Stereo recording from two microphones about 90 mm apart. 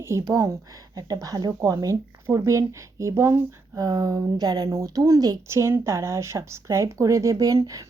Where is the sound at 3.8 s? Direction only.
45° right (ahead or behind).